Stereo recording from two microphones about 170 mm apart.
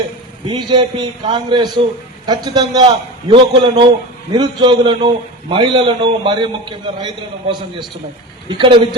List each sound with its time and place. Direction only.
0.4 s a man's voice: 25° right (ahead or behind)